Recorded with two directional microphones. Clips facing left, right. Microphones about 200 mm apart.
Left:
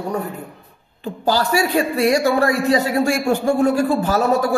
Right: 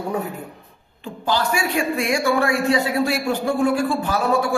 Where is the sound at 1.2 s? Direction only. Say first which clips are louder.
Left 4 dB; 40° left (ahead or behind).